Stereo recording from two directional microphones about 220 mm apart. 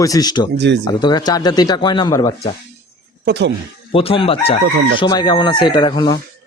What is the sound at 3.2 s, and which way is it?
Speech, 50° right (ahead or behind).